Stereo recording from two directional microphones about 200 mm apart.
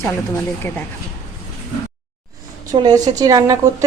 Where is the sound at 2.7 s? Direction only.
20° right (ahead or behind).